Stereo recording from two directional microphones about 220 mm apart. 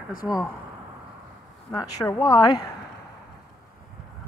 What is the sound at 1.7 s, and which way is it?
Speech, 15° left (ahead or behind).